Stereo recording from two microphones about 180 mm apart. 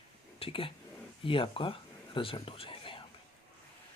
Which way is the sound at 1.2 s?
30° left (ahead or behind).